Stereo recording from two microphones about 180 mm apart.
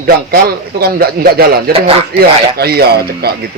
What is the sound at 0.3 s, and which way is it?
Speech, 60° right (ahead or behind).